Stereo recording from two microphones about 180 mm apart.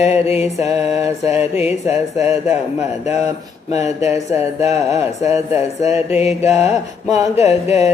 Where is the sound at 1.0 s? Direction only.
15° right (ahead or behind).